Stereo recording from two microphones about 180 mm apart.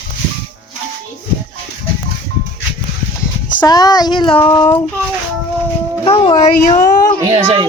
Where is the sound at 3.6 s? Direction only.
20° left (ahead or behind).